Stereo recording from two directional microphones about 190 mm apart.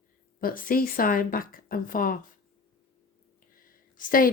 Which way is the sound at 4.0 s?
45° left (ahead or behind).